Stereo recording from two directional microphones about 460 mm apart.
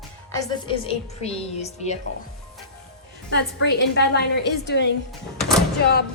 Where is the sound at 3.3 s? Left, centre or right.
Left.